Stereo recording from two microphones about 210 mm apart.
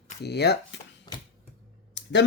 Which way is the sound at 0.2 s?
50° left (ahead or behind).